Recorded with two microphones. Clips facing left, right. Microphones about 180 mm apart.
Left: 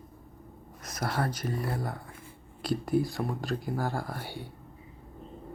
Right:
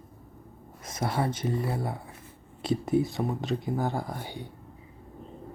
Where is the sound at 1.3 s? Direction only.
25° right (ahead or behind).